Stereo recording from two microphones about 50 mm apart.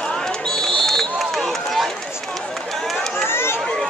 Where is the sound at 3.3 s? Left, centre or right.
Left.